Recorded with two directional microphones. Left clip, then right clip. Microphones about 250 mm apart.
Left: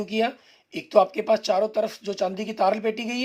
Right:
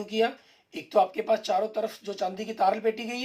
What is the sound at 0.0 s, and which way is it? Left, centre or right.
Speech, left.